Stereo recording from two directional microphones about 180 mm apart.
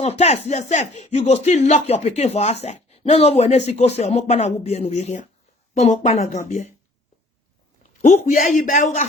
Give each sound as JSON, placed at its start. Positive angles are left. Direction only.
{"t": 0.0, "sound": "speech", "side_deg": 35}
{"t": 8.0, "sound": "speech", "side_deg": 45}